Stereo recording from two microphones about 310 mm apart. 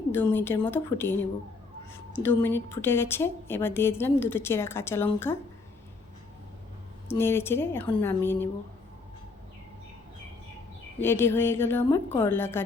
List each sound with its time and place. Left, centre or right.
0.1 s a woman's voice: centre
2.2 s a woman's voice: centre
7.1 s a woman's voice: centre
11.0 s a woman's voice: centre